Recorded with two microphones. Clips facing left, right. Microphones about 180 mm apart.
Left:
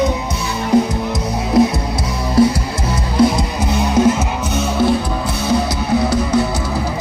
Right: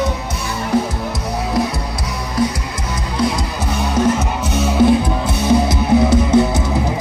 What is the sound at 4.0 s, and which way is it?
Music, 10° left (ahead or behind).